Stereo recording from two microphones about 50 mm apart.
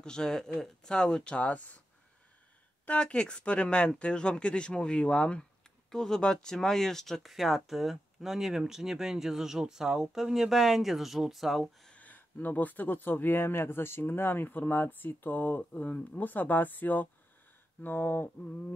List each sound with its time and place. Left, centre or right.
0.0 s speech: centre
3.0 s speech: centre
11.9 s speech: left
15.7 s speech: left